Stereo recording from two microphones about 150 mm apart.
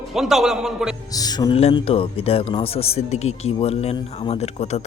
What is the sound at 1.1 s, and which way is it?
Speech, 25° left (ahead or behind).